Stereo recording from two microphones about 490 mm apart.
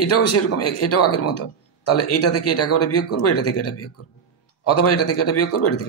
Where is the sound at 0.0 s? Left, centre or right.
Left.